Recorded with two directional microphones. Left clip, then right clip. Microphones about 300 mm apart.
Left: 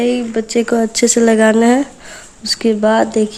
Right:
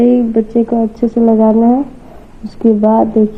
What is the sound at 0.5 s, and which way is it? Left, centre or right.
Speech, left.